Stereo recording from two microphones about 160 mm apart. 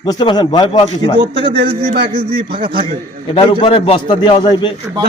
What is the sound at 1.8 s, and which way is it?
Speech, 55° right (ahead or behind).